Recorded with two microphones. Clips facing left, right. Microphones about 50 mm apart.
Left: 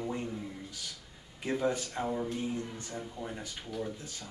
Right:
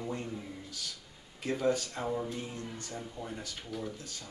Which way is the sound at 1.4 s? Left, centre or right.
Centre.